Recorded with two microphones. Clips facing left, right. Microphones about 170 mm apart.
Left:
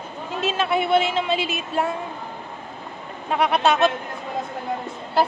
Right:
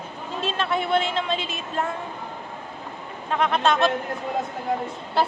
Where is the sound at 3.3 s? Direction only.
10° left (ahead or behind).